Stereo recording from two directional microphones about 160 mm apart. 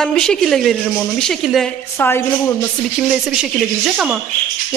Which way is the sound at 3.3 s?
5° right (ahead or behind).